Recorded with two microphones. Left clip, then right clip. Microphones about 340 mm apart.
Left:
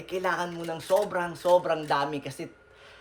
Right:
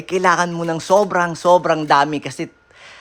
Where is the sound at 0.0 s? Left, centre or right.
Centre.